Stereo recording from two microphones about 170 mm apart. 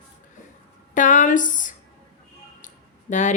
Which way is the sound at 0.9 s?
50° left (ahead or behind).